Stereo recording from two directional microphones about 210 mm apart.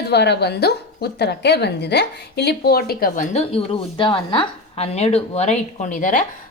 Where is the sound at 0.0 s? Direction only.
50° left (ahead or behind).